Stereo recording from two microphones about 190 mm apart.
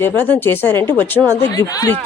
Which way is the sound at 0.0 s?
10° left (ahead or behind).